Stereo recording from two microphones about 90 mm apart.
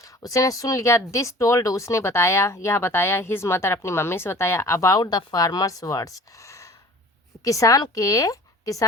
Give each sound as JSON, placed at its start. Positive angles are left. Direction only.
{"t": 0.0, "sound": "a woman's voice", "side_deg": 40}